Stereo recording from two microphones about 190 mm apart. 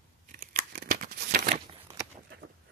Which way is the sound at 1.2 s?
50° right (ahead or behind).